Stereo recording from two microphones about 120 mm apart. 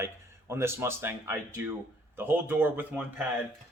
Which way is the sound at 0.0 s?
20° right (ahead or behind).